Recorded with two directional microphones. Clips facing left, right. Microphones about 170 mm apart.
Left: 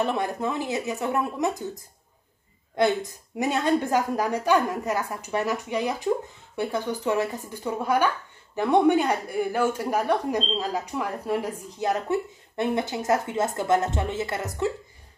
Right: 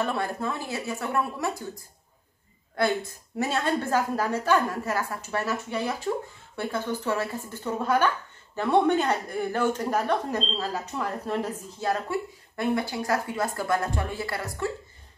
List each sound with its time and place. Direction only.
0.0 s a woman's voice: 20° left (ahead or behind)
2.7 s speech: 20° left (ahead or behind)